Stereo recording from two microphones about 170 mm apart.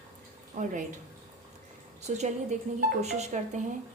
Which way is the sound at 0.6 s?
50° right (ahead or behind).